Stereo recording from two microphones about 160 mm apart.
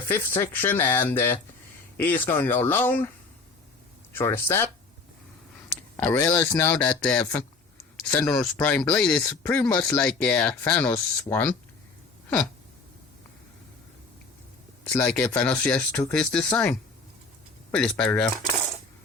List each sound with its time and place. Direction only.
0.1 s speech: 10° left (ahead or behind)
4.1 s speech: 15° left (ahead or behind)
6.0 s speech: 15° left (ahead or behind)
14.9 s speech: 10° left (ahead or behind)